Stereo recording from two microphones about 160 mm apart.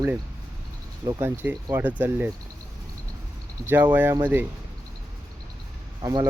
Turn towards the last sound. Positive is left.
turn(degrees=-25)  # may be behind; listen again after turning